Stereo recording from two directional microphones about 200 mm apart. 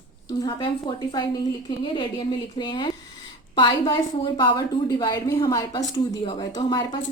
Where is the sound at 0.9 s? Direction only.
20° left (ahead or behind).